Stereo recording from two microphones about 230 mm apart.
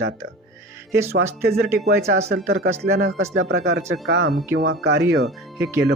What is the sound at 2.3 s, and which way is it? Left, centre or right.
Speech, right.